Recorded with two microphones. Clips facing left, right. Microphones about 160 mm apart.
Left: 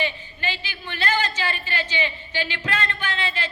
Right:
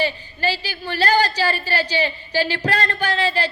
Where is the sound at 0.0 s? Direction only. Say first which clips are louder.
Right 6 dB; 35° right (ahead or behind).